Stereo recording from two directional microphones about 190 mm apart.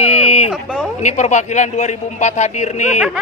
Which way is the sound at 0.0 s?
35° left (ahead or behind).